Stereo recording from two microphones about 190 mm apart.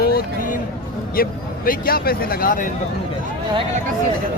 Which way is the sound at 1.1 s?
50° left (ahead or behind).